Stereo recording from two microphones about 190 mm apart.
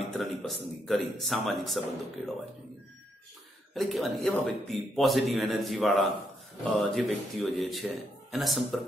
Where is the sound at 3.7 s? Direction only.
Centre (ahead or behind).